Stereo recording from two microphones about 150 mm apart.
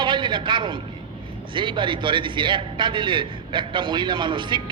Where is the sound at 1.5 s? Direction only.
35° right (ahead or behind).